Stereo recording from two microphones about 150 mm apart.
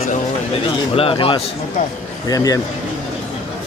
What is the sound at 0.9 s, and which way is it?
Speech, 40° left (ahead or behind).